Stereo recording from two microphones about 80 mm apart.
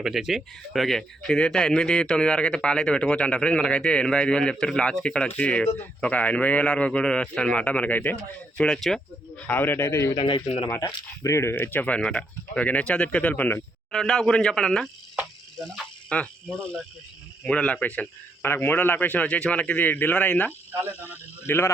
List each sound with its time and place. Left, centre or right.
0.0 s speech: centre
5.6 s speech: left
8.6 s speech: centre
9.5 s speech: left
10.2 s speech: left
10.8 s speech: left
13.9 s speech: centre
18.4 s speech: left